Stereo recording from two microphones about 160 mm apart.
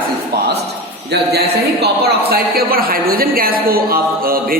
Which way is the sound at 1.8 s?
80° right.